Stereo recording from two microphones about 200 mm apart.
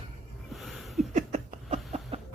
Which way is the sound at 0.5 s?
Centre (ahead or behind).